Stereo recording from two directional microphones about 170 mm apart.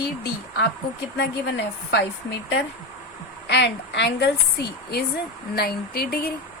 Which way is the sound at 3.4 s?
85° left.